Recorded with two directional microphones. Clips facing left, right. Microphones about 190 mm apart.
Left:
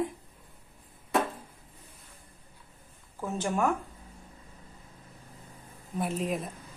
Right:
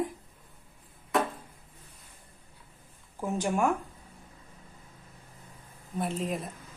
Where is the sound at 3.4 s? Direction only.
10° right (ahead or behind).